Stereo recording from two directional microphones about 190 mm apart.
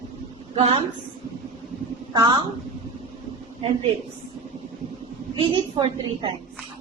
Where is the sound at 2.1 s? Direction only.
25° right (ahead or behind).